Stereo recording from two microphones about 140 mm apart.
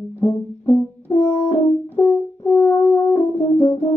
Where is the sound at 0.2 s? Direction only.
20° left (ahead or behind).